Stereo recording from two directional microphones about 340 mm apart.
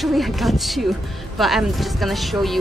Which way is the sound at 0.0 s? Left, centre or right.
Centre.